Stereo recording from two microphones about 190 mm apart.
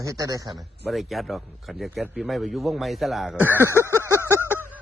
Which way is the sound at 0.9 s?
Centre (ahead or behind).